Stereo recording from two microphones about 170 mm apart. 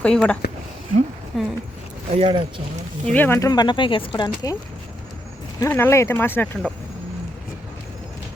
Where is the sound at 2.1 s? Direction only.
30° right (ahead or behind).